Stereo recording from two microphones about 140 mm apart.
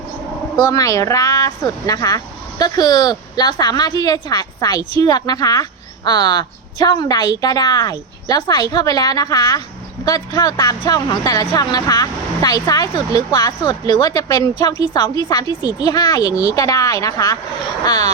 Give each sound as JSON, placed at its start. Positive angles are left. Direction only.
{"t": 0.7, "sound": "speech", "side_deg": 25}